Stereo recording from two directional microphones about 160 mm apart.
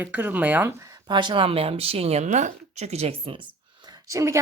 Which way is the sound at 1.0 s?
30° right (ahead or behind).